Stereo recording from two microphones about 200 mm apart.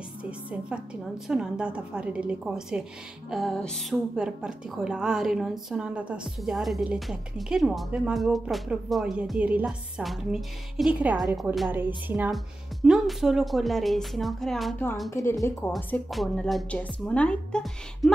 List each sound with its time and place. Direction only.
0.2 s a woman's voice: 5° right (ahead or behind)
15.0 s a woman's voice: 15° left (ahead or behind)
15.7 s a woman's voice: centre (ahead or behind)